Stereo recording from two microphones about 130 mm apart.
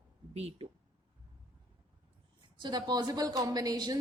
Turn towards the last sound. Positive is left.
turn(degrees=-30)  # may be behind; listen again after turning